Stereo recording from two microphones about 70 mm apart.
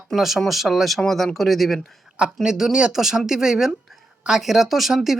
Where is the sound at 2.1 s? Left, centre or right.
Centre.